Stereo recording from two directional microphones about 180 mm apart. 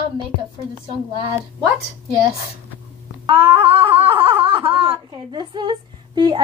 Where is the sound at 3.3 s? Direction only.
30° right (ahead or behind).